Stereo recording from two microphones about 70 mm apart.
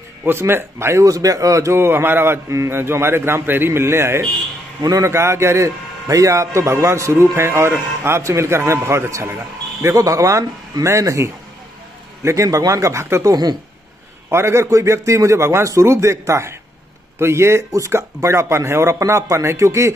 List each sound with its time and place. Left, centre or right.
0.2 s speech: right
1.0 s a man's voice: right
1.8 s speech: right
4.8 s a man's voice: right
9.8 s a man's voice: right
13.3 s speech: right
14.3 s a man's voice: right